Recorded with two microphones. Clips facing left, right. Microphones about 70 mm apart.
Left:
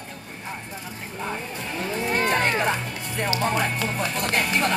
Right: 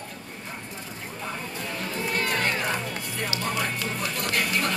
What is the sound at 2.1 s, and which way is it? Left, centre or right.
Run, left.